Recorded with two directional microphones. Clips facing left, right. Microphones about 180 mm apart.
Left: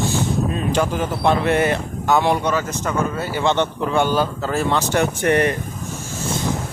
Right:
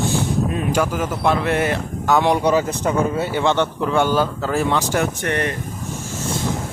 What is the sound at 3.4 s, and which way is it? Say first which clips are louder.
Speech: left 2 dB; 15° left (ahead or behind).